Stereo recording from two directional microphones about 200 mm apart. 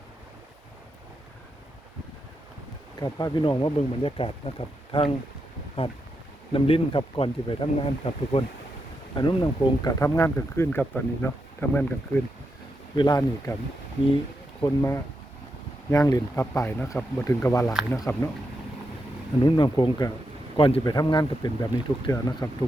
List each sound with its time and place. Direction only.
3.0 s speech: 20° left (ahead or behind)
13.0 s speech: 20° left (ahead or behind)
14.6 s speech: 15° left (ahead or behind)
19.5 s speech: 20° left (ahead or behind)